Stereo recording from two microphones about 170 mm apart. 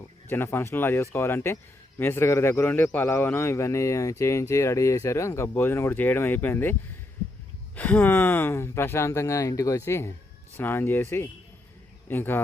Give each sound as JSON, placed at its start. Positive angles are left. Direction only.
{"t": 0.3, "sound": "a man's voice", "side_deg": 15}
{"t": 7.8, "sound": "a man's voice", "side_deg": 10}